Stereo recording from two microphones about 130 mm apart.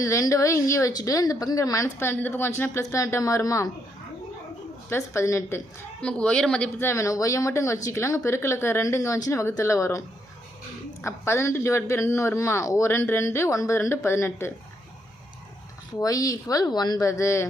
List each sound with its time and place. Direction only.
0.0 s speech: 25° left (ahead or behind)
4.9 s speech: 20° left (ahead or behind)
6.0 s speech: 10° left (ahead or behind)
6.7 s speech: 20° left (ahead or behind)
11.0 s speech: 20° left (ahead or behind)
16.0 s speech: 25° left (ahead or behind)